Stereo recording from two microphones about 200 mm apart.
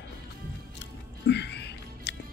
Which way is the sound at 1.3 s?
60° left (ahead or behind).